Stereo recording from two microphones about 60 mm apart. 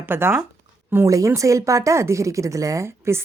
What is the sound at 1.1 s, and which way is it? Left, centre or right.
A woman's voice, right.